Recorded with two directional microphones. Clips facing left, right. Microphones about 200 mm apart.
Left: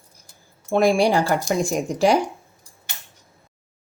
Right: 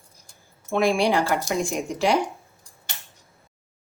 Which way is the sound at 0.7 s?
40° left (ahead or behind).